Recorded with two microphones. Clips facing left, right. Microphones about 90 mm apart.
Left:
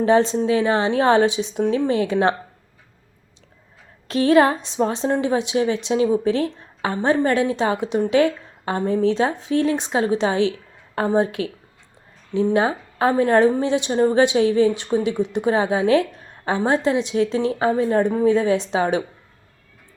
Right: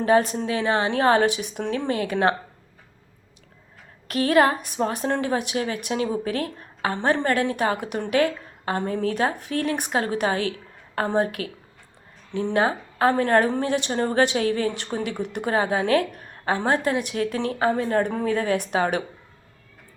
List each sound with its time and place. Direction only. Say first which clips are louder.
0.0 s a woman's voice: left 3 dB; 25° left (ahead or behind)
4.1 s a woman's voice: left 3 dB; 25° left (ahead or behind)